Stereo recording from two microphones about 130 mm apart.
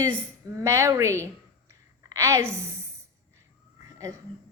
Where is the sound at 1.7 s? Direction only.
25° right (ahead or behind).